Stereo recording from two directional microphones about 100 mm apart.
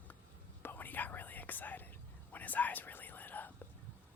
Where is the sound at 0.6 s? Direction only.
20° left (ahead or behind).